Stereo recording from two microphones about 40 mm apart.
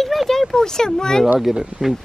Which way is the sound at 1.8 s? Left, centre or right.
Centre.